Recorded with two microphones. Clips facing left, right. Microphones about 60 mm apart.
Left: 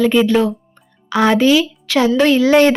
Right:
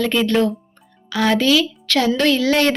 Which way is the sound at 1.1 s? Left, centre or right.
Left.